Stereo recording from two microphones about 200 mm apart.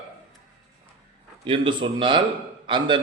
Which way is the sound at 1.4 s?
25° right (ahead or behind).